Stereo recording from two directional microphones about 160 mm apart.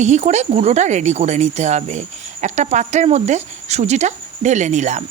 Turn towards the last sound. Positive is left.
turn(degrees=-45)  # may be behind; listen again after turning